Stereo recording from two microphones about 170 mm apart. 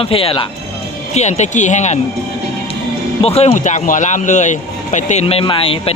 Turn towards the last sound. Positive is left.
turn(degrees=30)  # may be behind; listen again after turning